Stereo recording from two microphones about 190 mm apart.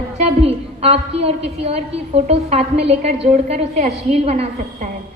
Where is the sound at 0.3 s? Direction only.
30° right (ahead or behind).